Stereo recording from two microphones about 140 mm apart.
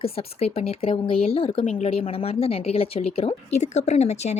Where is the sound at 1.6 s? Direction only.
60° left (ahead or behind).